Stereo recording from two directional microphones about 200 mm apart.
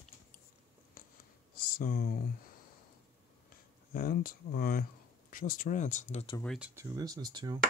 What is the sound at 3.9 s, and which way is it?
Speech, 45° left (ahead or behind).